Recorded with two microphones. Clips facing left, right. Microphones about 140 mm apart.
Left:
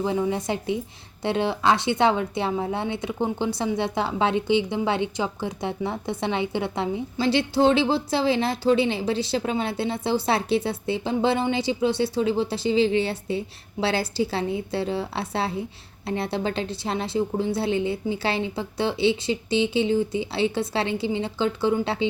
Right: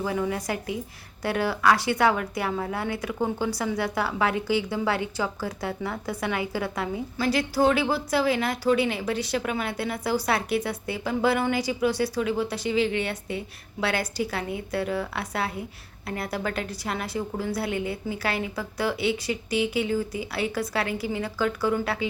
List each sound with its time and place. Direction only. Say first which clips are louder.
0.0 s speech: left 3 dB; 25° left (ahead or behind)